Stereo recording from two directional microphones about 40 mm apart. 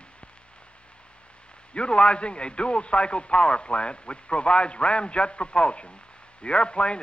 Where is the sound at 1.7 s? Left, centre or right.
Left.